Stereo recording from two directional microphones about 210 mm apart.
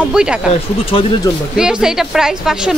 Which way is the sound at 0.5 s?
25° left (ahead or behind).